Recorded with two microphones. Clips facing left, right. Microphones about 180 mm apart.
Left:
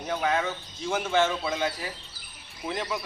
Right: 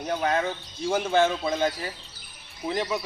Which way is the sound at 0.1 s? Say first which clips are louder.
Right 1 dB; 35° right (ahead or behind).